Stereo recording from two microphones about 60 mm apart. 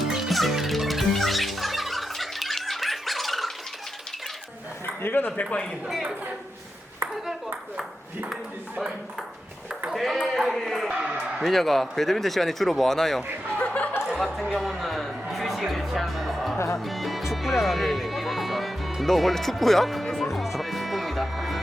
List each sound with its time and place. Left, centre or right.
0.0 s music: centre
5.0 s speech: left
5.9 s a man's voice: centre
7.3 s speech: centre
9.9 s speech: centre
10.8 s a man's voice: centre
11.4 s speech: centre
13.6 s music: left
14.2 s music: centre